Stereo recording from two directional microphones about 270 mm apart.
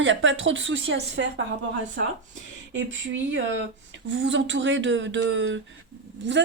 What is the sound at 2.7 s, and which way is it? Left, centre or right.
A woman's voice, right.